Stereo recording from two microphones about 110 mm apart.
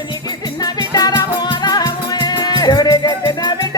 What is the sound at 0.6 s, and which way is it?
Music, 35° left (ahead or behind).